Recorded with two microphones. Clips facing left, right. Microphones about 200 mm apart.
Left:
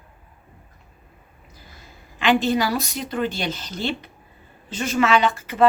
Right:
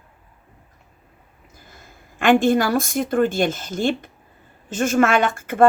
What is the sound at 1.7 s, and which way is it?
A woman's voice, 50° right (ahead or behind).